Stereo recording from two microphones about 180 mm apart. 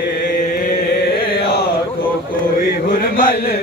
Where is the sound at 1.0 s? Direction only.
65° left (ahead or behind).